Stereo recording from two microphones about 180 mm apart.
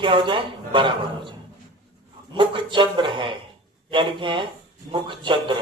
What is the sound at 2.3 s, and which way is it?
A man's voice, 25° right (ahead or behind).